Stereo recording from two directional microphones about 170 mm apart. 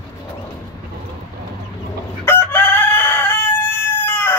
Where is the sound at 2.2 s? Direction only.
10° left (ahead or behind).